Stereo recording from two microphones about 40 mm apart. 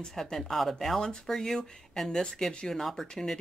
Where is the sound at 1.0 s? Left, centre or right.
Centre.